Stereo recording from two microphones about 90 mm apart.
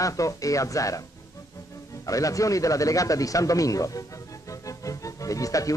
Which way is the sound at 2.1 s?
40° left (ahead or behind).